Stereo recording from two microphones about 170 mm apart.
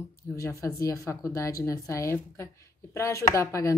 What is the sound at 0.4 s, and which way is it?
A woman's voice, 20° left (ahead or behind).